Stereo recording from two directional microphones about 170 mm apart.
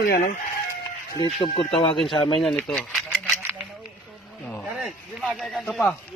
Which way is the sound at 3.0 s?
15° right (ahead or behind).